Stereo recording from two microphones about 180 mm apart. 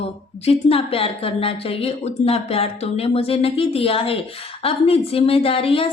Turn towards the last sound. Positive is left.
turn(degrees=30)  # may be behind; listen again after turning